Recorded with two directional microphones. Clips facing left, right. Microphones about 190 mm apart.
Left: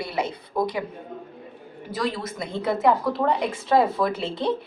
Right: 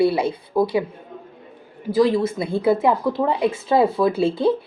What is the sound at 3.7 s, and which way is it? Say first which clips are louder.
Speech: right 2 dB; 25° right (ahead or behind).